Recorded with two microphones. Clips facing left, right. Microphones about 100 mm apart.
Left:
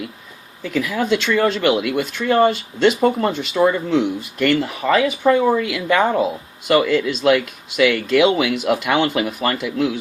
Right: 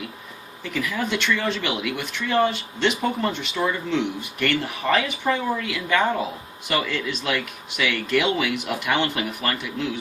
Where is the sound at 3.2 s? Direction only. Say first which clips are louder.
Left 7 dB; 80° left.